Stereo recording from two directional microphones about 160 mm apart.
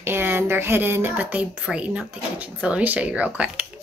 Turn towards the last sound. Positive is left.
turn(degrees=-10)  # may be behind; listen again after turning